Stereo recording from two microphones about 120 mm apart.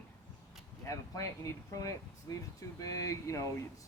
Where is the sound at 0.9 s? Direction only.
25° left (ahead or behind).